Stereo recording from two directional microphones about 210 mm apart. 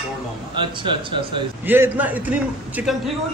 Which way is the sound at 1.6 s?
10° right (ahead or behind).